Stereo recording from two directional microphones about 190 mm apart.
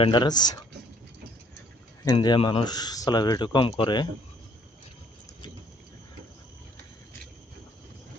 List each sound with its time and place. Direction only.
0.0 s speech: 25° left (ahead or behind)
2.0 s speech: 25° left (ahead or behind)